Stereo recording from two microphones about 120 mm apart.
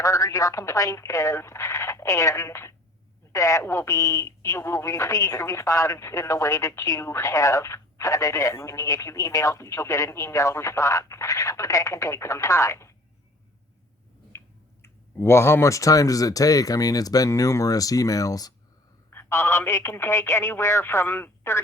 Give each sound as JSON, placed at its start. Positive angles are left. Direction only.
{"t": 0.0, "sound": "speech", "side_deg": 25}
{"t": 14.3, "sound": "speech", "side_deg": 20}
{"t": 19.1, "sound": "speech", "side_deg": 20}